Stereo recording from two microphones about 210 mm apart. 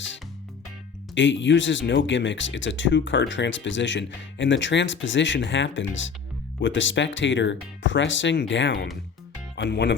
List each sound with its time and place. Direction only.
1.1 s speech: 60° left (ahead or behind)